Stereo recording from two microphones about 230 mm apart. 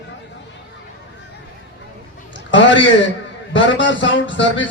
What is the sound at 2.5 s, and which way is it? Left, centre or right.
A man's voice, left.